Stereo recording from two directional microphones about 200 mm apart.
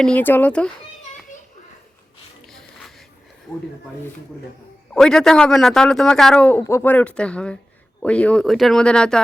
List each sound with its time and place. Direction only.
0.0 s speech: 5° left (ahead or behind)
2.5 s wheeze: centre (ahead or behind)
4.9 s a man's voice: 5° left (ahead or behind)